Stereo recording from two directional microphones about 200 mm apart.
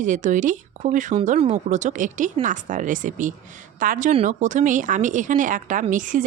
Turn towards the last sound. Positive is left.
turn(degrees=-40)  # may be behind; listen again after turning